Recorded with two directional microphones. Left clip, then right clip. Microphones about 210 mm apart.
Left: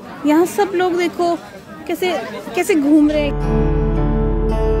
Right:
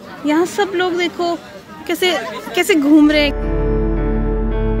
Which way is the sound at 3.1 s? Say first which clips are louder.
Right 3 dB; 20° right (ahead or behind).